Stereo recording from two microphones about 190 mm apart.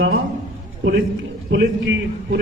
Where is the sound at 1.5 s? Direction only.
75° right (ahead or behind).